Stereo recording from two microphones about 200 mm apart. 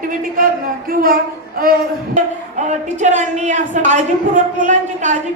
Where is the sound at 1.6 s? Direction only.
40° right (ahead or behind).